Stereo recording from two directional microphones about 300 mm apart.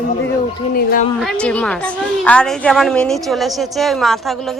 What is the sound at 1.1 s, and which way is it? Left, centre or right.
A woman's voice, centre.